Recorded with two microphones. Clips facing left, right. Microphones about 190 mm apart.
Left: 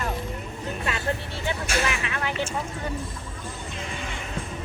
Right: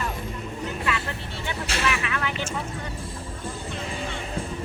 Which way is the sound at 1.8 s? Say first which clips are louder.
Right 1 dB; 25° left (ahead or behind).